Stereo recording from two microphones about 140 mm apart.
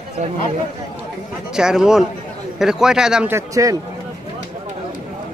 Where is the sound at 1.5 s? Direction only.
5° right (ahead or behind).